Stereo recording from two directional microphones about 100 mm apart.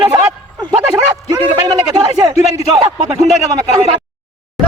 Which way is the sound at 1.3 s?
45° right (ahead or behind).